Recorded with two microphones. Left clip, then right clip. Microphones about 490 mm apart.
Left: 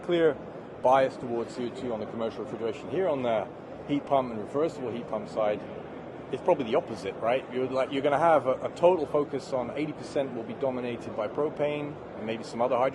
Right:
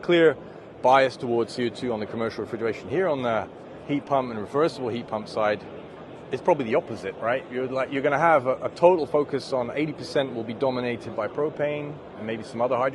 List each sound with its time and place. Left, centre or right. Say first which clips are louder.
0.1 s speech: right 6 dB; right